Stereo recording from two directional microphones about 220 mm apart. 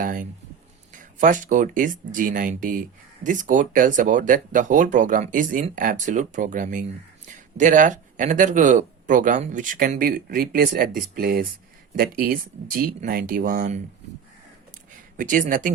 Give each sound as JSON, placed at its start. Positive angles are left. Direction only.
{"t": 0.0, "sound": "speech", "side_deg": -40}
{"t": 15.2, "sound": "speech", "side_deg": -35}